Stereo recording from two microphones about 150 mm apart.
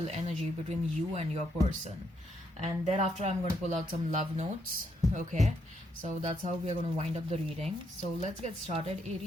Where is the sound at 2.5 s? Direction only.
45° right (ahead or behind).